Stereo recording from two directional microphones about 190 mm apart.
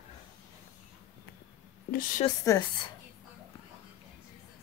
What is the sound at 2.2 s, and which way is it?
Speech, 15° left (ahead or behind).